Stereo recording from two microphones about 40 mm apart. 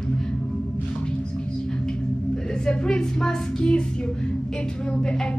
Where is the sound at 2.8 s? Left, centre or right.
Centre.